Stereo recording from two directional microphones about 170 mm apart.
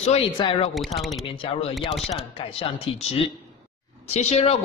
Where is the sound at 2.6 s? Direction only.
35° left (ahead or behind).